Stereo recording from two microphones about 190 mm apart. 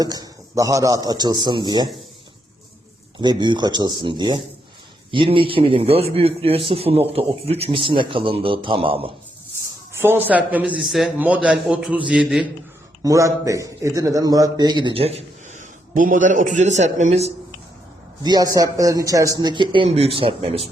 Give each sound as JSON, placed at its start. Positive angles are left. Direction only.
{"t": 0.0, "sound": "a man's voice", "side_deg": -20}
{"t": 3.2, "sound": "a man's voice", "side_deg": -25}
{"t": 9.9, "sound": "a man's voice", "side_deg": -10}
{"t": 13.0, "sound": "a man's voice", "side_deg": -15}
{"t": 18.2, "sound": "a man's voice", "side_deg": -20}